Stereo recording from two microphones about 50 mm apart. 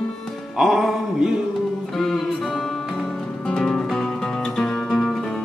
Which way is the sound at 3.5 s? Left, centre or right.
Centre.